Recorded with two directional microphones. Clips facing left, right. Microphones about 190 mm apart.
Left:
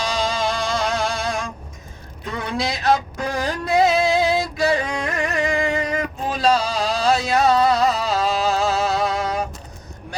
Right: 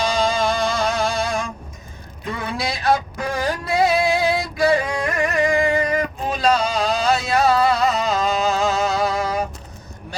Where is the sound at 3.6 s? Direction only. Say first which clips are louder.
Left 2 dB; 20° left (ahead or behind).